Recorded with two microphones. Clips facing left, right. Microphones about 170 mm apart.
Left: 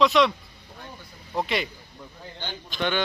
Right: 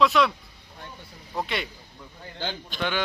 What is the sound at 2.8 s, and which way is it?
Speech, 5° right (ahead or behind).